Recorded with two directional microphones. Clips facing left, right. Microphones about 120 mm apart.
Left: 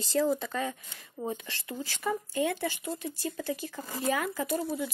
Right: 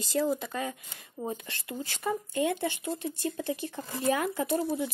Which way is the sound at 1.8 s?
25° right (ahead or behind).